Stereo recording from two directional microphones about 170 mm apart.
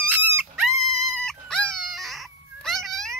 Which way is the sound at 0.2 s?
10° right (ahead or behind).